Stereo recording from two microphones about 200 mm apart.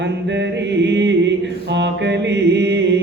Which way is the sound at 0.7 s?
60° right (ahead or behind).